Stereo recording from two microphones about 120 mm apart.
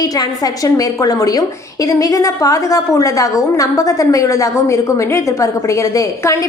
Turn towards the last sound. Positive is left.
turn(degrees=25)  # may be behind; listen again after turning